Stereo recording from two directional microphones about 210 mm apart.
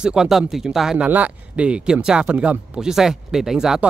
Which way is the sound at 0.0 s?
5° right (ahead or behind).